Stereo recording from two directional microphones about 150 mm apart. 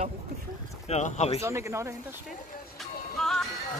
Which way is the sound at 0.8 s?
50° left (ahead or behind).